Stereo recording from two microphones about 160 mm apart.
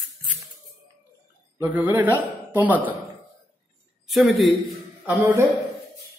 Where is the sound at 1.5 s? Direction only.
15° right (ahead or behind).